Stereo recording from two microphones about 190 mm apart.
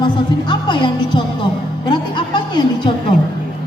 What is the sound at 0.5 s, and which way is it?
Music, 25° left (ahead or behind).